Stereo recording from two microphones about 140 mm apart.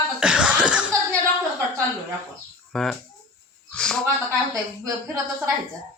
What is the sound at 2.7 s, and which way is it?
Speech, 5° left (ahead or behind).